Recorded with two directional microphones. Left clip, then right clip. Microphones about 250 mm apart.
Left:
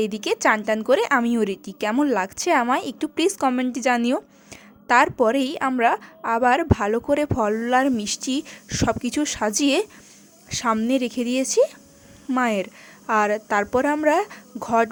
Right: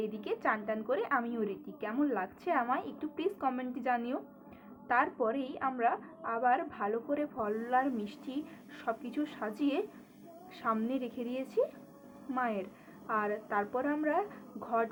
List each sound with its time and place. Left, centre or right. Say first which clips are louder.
0.0 s a woman's voice: left 13 dB; left